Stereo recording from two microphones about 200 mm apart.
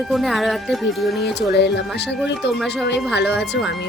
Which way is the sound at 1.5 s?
55° left (ahead or behind).